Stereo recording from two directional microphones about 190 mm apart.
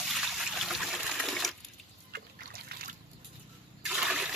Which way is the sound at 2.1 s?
55° right (ahead or behind).